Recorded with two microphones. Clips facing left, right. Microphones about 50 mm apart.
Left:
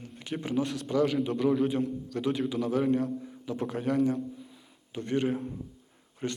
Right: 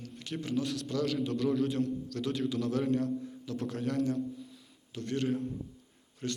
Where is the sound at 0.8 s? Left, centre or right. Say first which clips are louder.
Left 5 dB; left.